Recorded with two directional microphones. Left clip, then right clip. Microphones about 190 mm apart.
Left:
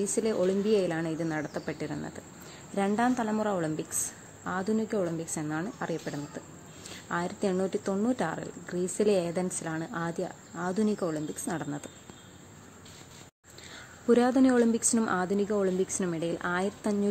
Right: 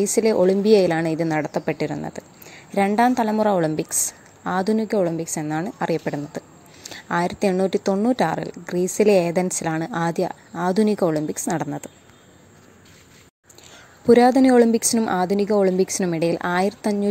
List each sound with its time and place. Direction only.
0.0 s a woman's voice: 25° right (ahead or behind)
14.0 s a woman's voice: 30° right (ahead or behind)